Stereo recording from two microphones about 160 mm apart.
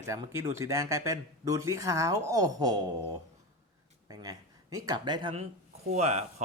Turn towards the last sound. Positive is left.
turn(degrees=-45)  # may be behind; listen again after turning